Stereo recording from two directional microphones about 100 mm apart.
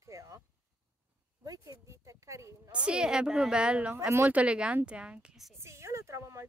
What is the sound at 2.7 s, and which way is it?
Speech, 10° right (ahead or behind).